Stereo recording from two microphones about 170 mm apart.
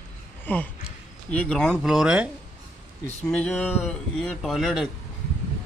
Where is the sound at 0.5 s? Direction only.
10° left (ahead or behind).